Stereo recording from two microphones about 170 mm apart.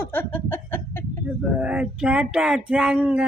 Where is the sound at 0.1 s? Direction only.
10° left (ahead or behind).